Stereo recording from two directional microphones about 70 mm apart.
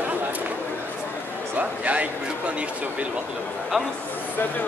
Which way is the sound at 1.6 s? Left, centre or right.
Right.